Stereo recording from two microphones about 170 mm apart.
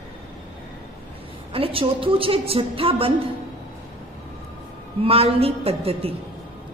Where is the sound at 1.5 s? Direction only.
35° right (ahead or behind).